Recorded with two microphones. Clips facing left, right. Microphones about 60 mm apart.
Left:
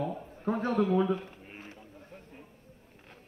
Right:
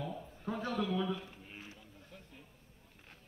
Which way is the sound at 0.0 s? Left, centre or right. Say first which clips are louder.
Left 8 dB; left.